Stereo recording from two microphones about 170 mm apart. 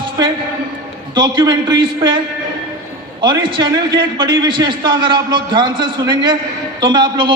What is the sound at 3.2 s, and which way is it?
A man's voice, 30° right (ahead or behind).